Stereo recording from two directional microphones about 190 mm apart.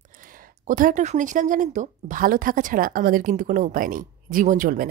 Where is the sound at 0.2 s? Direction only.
45° right (ahead or behind).